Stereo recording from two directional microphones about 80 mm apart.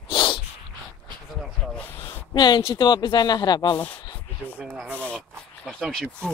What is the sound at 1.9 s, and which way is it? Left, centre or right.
A man's voice, left.